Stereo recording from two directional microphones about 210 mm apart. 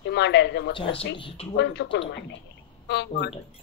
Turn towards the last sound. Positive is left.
turn(degrees=55)  # may be behind; listen again after turning